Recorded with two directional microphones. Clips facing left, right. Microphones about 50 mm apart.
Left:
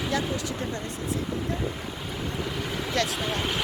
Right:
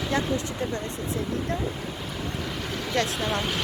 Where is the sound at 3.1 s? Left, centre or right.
Centre.